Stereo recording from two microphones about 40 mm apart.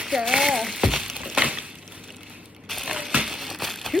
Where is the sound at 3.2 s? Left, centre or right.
Centre.